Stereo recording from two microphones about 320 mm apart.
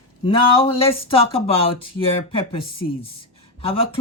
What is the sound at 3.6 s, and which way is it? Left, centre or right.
Speech, centre.